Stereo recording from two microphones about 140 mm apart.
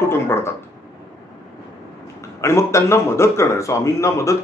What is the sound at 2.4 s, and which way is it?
Speech, 20° left (ahead or behind).